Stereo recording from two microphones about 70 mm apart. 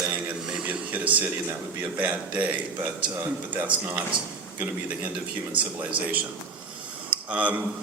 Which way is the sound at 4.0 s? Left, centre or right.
Centre.